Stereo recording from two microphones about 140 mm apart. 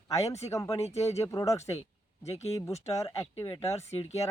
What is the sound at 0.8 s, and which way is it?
Speech, 50° left (ahead or behind).